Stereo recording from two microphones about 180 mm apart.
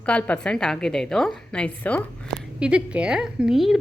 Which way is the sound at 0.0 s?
5° left (ahead or behind).